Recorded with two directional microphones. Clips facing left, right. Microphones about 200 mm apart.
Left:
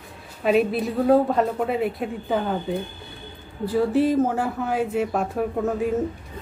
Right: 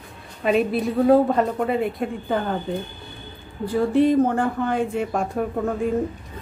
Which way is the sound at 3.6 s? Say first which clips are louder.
Right 2 dB; 5° left (ahead or behind).